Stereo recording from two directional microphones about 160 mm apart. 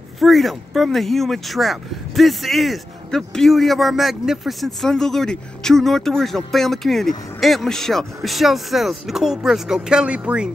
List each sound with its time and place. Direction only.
0.2 s speech: centre (ahead or behind)